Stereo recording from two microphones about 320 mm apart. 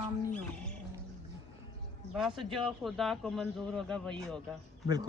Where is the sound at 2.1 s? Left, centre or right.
Centre.